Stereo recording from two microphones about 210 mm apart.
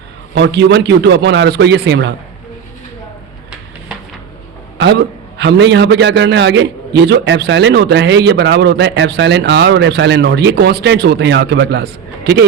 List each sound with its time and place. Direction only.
0.3 s a man's voice: 55° right (ahead or behind)
4.8 s a man's voice: 55° right (ahead or behind)